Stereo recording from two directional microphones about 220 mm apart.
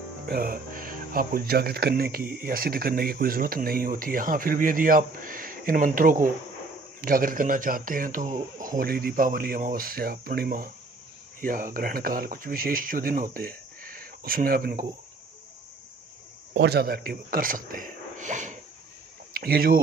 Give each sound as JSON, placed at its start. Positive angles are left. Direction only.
{"t": 0.3, "sound": "speech", "side_deg": -40}
{"t": 16.5, "sound": "speech", "side_deg": -50}